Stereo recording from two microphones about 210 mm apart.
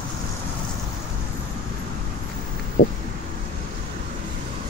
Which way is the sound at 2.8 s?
40° left (ahead or behind).